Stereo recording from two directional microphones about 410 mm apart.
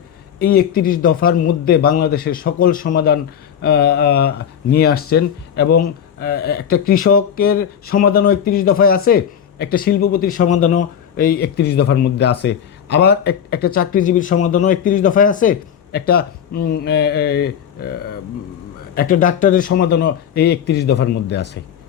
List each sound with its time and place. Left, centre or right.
0.3 s speech: left
18.9 s speech: centre